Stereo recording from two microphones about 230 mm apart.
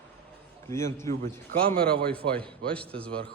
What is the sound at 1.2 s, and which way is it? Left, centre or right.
Speech, right.